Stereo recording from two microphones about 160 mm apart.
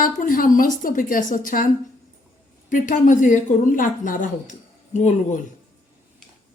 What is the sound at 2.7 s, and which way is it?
A woman's voice, 55° left (ahead or behind).